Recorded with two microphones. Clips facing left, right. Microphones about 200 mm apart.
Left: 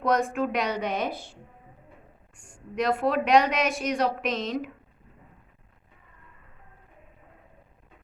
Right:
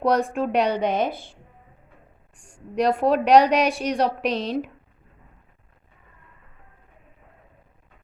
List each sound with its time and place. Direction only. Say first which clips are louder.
0.0 s speech: right 3 dB; 35° right (ahead or behind)
2.3 s speech: right 5 dB; 35° right (ahead or behind)